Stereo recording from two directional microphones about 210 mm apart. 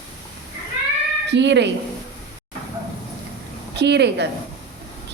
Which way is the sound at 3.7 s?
55° right (ahead or behind).